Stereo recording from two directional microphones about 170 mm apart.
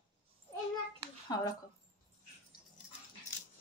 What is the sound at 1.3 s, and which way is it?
Speech, 20° left (ahead or behind).